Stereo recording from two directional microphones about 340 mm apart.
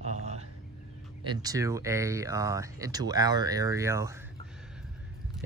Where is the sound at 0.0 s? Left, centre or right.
Centre.